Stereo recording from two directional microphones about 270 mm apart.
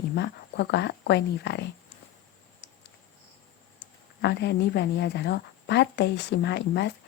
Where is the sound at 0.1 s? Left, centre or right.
Left.